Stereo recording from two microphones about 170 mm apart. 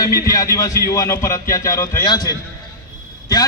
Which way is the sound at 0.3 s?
20° left (ahead or behind).